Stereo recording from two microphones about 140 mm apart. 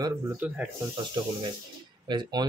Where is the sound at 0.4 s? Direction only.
10° right (ahead or behind).